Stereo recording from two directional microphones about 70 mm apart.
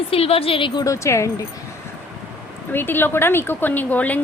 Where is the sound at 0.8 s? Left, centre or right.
Left.